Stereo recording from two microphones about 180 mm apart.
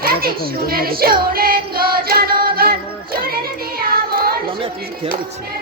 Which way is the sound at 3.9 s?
55° right (ahead or behind).